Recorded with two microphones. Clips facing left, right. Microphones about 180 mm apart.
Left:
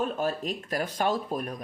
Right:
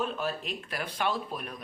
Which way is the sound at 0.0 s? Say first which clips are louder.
Left 4 dB; 45° left (ahead or behind).